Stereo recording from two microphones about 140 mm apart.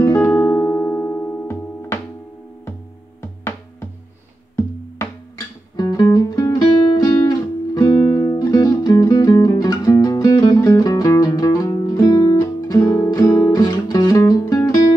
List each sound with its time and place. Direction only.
0.0 s music: 25° left (ahead or behind)
3.2 s music: 20° left (ahead or behind)
5.8 s guitar: 25° left (ahead or behind)
10.8 s music: 25° left (ahead or behind)